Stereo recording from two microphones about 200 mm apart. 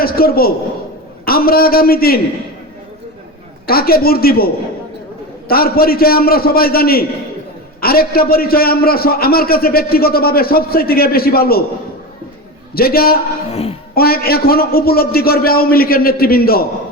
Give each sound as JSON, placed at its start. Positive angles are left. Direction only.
{"t": 0.0, "sound": "a man's voice", "side_deg": 50}
{"t": 3.7, "sound": "a man's voice", "side_deg": 50}
{"t": 12.7, "sound": "a man's voice", "side_deg": 50}
{"t": 13.5, "sound": "a woman's voice", "side_deg": 30}
{"t": 13.9, "sound": "a man's voice", "side_deg": 50}